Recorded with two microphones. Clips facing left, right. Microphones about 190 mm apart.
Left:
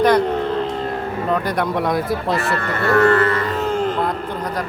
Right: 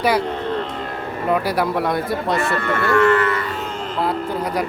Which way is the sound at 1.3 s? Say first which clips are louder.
Right 2 dB; 5° right (ahead or behind).